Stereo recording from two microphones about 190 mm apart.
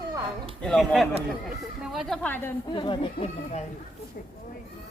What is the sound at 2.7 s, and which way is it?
Speech, 25° left (ahead or behind).